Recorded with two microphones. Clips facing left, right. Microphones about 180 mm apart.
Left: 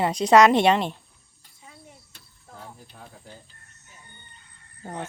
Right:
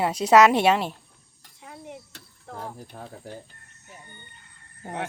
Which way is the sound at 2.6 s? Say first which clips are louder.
Right 6 dB; 50° right (ahead or behind).